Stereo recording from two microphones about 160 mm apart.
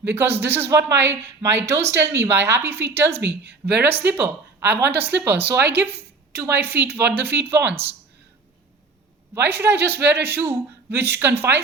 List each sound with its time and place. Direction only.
0.0 s speech: 15° right (ahead or behind)
9.3 s speech: 15° right (ahead or behind)